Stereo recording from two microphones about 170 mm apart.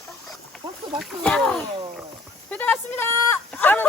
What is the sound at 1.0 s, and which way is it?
Speech, centre (ahead or behind).